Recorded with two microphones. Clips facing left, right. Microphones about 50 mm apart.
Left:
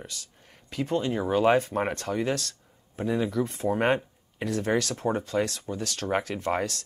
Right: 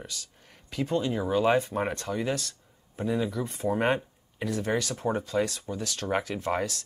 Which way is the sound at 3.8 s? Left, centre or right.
Left.